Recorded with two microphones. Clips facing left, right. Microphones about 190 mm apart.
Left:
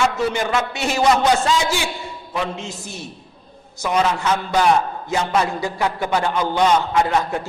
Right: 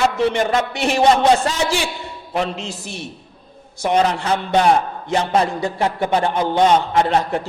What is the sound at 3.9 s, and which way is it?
A man's voice, 35° right (ahead or behind).